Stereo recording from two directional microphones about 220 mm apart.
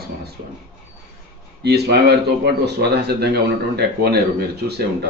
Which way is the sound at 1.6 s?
50° right (ahead or behind).